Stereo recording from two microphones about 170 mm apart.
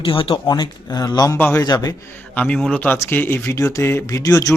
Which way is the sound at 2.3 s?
10° left (ahead or behind).